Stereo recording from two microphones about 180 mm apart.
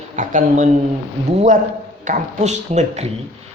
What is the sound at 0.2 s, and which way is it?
Speech, 45° right (ahead or behind).